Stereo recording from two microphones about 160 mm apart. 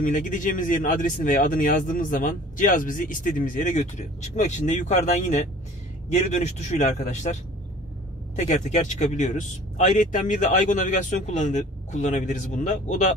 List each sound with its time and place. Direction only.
0.0 s speech: 55° left (ahead or behind)
8.4 s speech: 50° left (ahead or behind)